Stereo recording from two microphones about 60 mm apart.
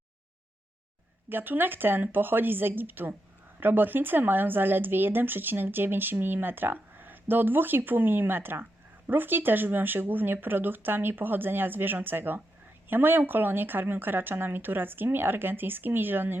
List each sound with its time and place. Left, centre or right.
1.3 s speech: right